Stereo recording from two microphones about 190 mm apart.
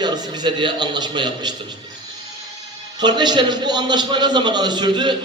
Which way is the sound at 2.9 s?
20° right (ahead or behind).